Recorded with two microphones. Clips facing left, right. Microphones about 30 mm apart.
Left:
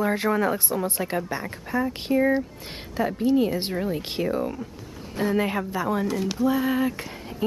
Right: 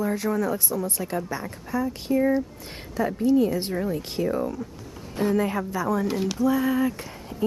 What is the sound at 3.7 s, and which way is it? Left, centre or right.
Speech, left.